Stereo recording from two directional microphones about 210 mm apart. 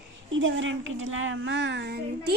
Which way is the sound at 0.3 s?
65° right (ahead or behind).